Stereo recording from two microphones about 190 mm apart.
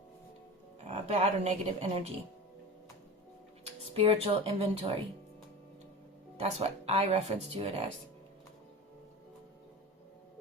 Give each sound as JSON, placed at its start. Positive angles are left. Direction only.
{"t": 0.9, "sound": "a woman's voice", "side_deg": -35}
{"t": 3.9, "sound": "speech", "side_deg": -30}
{"t": 6.4, "sound": "speech", "side_deg": -35}